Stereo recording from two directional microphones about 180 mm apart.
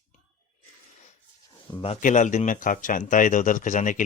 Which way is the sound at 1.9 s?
45° left (ahead or behind).